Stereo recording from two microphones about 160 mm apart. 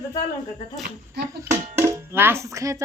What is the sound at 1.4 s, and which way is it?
Speech, 15° right (ahead or behind).